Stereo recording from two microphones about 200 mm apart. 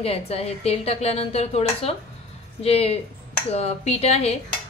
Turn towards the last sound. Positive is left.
turn(degrees=30)  # may be behind; listen again after turning